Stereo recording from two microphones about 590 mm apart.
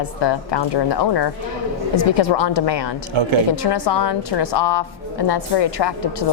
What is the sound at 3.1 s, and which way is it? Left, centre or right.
Speech, right.